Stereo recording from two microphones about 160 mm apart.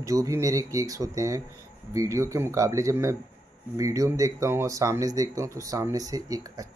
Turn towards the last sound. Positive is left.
turn(degrees=-20)  # may be behind; listen again after turning